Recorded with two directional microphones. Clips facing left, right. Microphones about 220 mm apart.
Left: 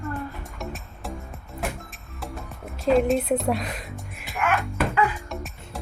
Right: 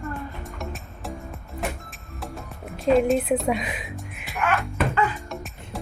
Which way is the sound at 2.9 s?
Centre (ahead or behind).